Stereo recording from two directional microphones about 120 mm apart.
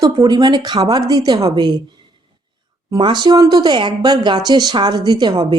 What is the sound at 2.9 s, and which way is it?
Speech, 35° right (ahead or behind).